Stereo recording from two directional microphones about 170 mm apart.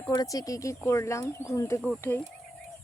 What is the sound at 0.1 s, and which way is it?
Speech, 25° left (ahead or behind).